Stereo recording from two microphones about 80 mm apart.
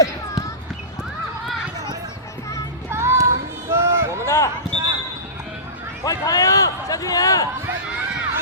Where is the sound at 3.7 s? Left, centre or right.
Right.